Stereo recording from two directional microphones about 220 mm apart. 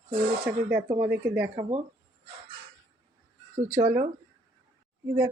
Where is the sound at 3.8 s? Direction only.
35° right (ahead or behind).